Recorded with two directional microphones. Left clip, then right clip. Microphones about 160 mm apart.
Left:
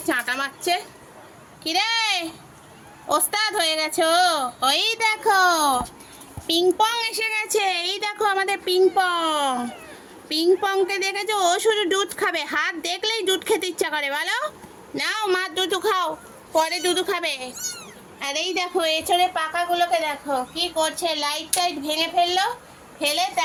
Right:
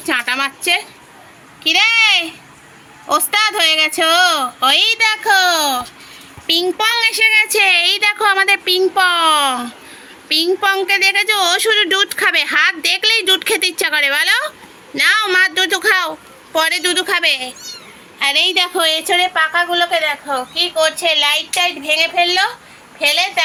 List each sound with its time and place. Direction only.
0.0 s a woman's voice: 10° right (ahead or behind)